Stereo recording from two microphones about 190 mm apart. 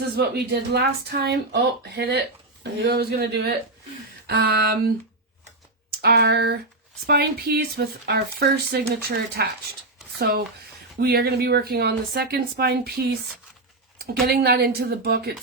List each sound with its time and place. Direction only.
0.2 s speech: 55° right (ahead or behind)